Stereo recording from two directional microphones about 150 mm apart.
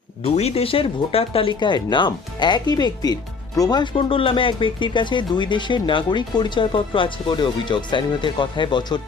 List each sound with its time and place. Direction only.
0.2 s speech: 45° left (ahead or behind)